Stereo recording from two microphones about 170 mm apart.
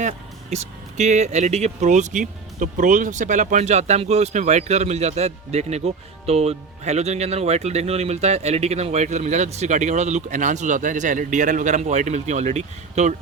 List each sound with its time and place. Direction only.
0.5 s speech: 40° right (ahead or behind)